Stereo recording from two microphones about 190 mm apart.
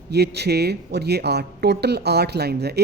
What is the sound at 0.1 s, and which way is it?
A woman's voice, 60° right (ahead or behind).